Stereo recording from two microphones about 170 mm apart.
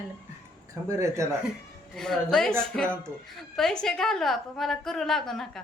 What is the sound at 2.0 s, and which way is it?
A woman's voice, centre (ahead or behind).